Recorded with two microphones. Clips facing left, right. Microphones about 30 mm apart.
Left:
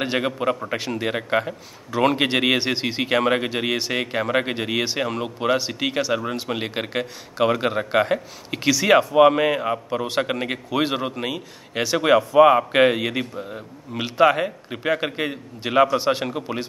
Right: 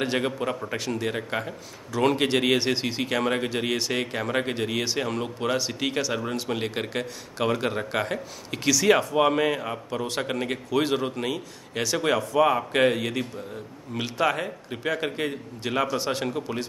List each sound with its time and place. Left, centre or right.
0.0 s a man's voice: centre